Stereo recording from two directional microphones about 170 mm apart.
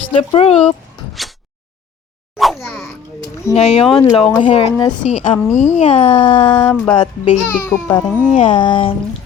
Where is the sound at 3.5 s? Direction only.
35° left (ahead or behind).